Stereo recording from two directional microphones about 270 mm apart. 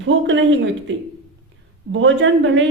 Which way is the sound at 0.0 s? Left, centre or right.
Right.